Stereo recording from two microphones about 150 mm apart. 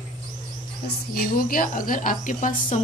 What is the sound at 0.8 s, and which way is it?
A woman's voice, 75° left (ahead or behind).